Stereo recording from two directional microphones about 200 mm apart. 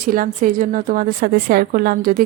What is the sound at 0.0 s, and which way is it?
A woman's voice, 45° right (ahead or behind).